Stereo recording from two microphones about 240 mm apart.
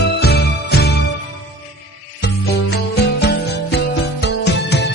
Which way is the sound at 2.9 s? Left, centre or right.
Left.